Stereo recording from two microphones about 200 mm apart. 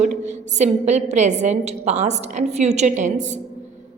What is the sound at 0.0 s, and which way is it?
A woman's voice, 35° right (ahead or behind).